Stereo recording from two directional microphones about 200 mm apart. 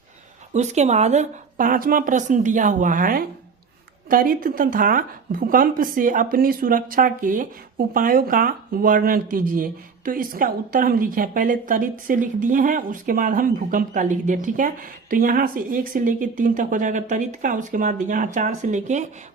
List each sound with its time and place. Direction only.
0.5 s speech: 35° right (ahead or behind)